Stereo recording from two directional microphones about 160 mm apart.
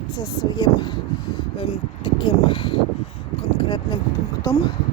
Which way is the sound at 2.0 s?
30° left (ahead or behind).